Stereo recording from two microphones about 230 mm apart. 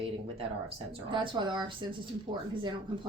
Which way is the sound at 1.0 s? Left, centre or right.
Right.